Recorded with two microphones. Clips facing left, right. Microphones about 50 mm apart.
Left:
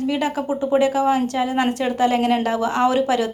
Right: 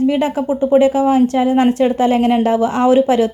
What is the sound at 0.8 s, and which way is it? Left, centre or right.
A woman's voice, right.